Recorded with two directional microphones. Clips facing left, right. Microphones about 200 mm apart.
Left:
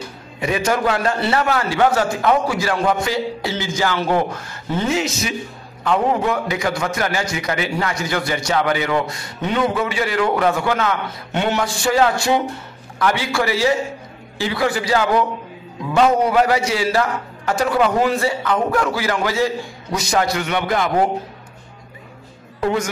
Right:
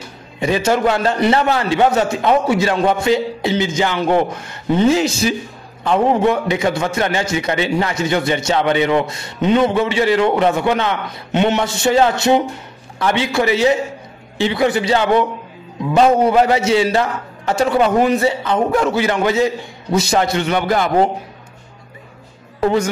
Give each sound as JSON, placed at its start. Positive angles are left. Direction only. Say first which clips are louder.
{"t": 0.4, "sound": "a man's voice", "louder": "right 4 dB", "side_deg": -25}
{"t": 4.9, "sound": "a man's voice", "louder": "right 5 dB", "side_deg": -30}
{"t": 22.6, "sound": "a woman's voice", "louder": "right 4 dB", "side_deg": -30}